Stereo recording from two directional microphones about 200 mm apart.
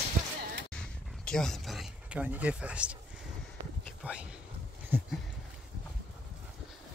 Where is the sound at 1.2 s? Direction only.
5° left (ahead or behind).